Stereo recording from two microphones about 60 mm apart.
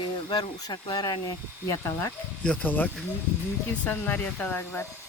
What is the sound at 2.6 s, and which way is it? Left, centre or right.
Speech, left.